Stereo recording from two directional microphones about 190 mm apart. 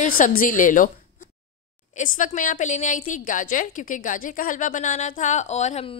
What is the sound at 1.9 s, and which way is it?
A woman's voice, 45° left (ahead or behind).